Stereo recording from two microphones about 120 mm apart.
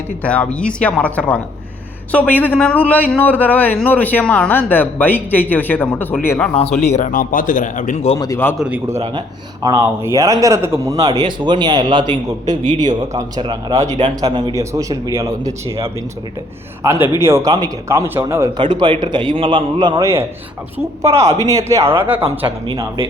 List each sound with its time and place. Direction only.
0.2 s speech: 10° left (ahead or behind)
6.5 s speech: 60° left (ahead or behind)
8.5 s a man's voice: 10° right (ahead or behind)
9.6 s a man's voice: 20° right (ahead or behind)
18.5 s a man's voice: 40° right (ahead or behind)
21.2 s a man's voice: 25° right (ahead or behind)